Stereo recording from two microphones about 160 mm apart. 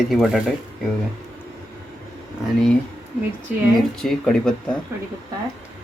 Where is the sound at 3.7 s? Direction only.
Centre (ahead or behind).